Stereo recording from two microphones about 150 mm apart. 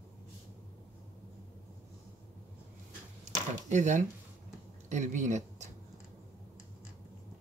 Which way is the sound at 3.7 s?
55° right (ahead or behind).